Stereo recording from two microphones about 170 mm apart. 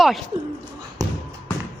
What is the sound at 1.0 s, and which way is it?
Bouncing, 20° right (ahead or behind).